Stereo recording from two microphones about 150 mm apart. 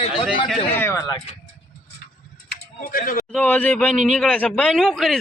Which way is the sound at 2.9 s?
70° left (ahead or behind).